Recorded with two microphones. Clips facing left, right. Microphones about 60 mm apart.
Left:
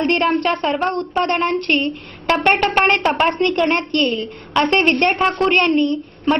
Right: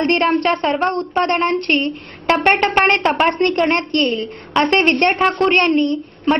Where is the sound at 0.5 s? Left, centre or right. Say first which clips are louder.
Right 2 dB; centre.